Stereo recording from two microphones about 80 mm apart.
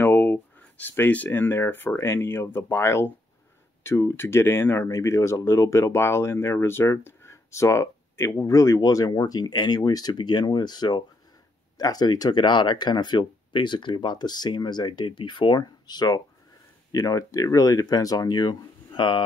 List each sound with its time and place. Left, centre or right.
0.0 s speech: left
10.1 s speech: left